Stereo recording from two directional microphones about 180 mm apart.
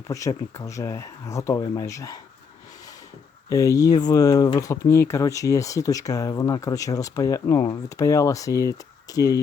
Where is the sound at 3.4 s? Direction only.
20° left (ahead or behind).